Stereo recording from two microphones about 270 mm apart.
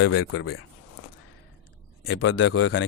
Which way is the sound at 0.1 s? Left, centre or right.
Left.